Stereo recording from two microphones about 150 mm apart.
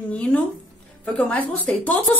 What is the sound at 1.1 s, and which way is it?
Speech, 10° left (ahead or behind).